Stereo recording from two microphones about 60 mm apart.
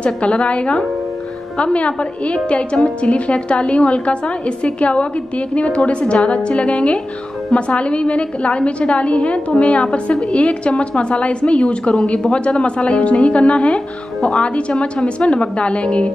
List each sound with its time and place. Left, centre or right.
0.0 s a woman's voice: centre